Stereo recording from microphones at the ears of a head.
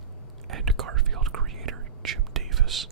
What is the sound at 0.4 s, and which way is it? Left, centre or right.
Whispering, right.